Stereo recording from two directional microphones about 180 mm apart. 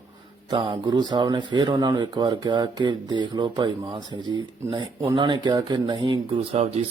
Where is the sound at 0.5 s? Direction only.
25° right (ahead or behind).